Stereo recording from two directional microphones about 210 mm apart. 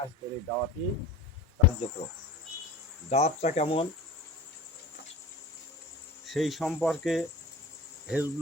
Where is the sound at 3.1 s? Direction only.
30° left (ahead or behind).